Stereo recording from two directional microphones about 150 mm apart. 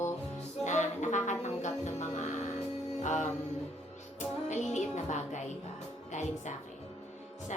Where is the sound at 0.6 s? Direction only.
50° left (ahead or behind).